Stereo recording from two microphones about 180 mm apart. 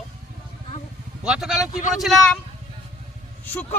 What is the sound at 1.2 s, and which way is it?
Speech, 5° right (ahead or behind).